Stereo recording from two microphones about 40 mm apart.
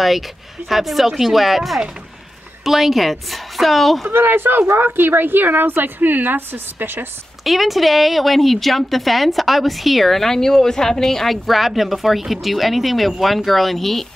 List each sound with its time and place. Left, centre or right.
0.7 s a woman's voice: centre
4.1 s a woman's voice: right
7.4 s a woman's voice: centre